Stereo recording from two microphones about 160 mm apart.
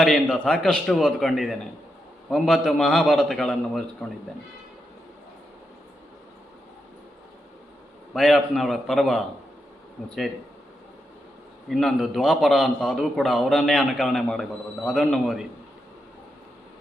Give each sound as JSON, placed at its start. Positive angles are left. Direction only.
{"t": 0.0, "sound": "a man's voice", "side_deg": 5}
{"t": 8.1, "sound": "a man's voice", "side_deg": 0}
{"t": 11.7, "sound": "a man's voice", "side_deg": 0}